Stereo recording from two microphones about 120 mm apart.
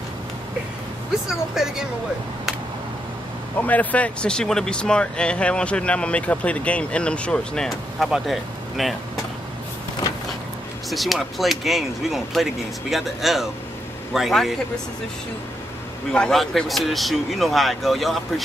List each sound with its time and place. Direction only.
1.3 s speech: 5° right (ahead or behind)
3.5 s speech: 15° left (ahead or behind)
10.9 s speech: centre (ahead or behind)
16.1 s speech: 5° left (ahead or behind)